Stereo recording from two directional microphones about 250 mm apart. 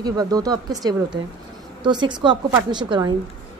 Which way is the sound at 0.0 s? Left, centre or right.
Centre.